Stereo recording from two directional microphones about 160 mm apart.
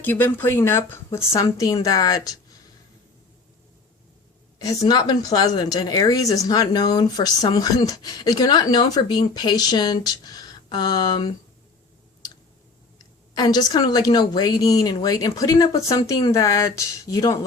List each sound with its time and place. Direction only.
0.0 s speech: 10° left (ahead or behind)
4.6 s a woman's voice: 20° left (ahead or behind)
13.3 s a woman's voice: 25° left (ahead or behind)